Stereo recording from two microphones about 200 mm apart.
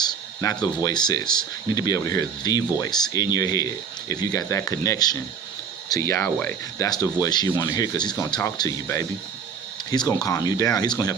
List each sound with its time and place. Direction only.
0.0 s speech: 20° left (ahead or behind)
1.2 s speech: 5° left (ahead or behind)
1.7 s speech: 15° left (ahead or behind)